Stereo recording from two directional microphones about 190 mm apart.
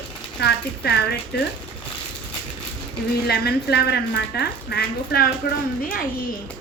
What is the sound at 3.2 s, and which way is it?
Speech, 60° left (ahead or behind).